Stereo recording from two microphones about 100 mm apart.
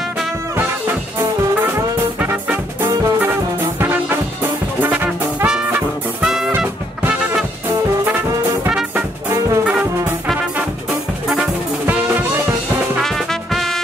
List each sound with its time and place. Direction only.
2.1 s music: 15° right (ahead or behind)
9.7 s brass instrument: 15° right (ahead or behind)
11.8 s music: 20° right (ahead or behind)
13.0 s music: 5° left (ahead or behind)